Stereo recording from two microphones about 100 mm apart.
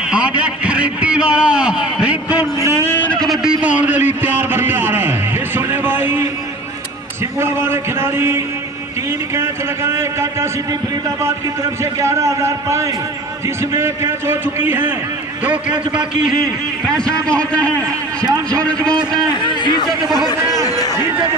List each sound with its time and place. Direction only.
0.1 s a man's voice: 10° right (ahead or behind)
2.8 s a sound: 20° left (ahead or behind)
3.6 s a sound: 15° right (ahead or behind)
7.3 s a man's voice: 25° right (ahead or behind)
11.8 s a man's voice: 30° right (ahead or behind)
16.8 s a man's voice: 10° left (ahead or behind)
17.7 s a man's voice: 35° right (ahead or behind)
18.6 s a man's voice: 10° left (ahead or behind)
19.4 s a man's voice: 50° left (ahead or behind)
19.9 s speech: centre (ahead or behind)
20.6 s a man's voice: 40° left (ahead or behind)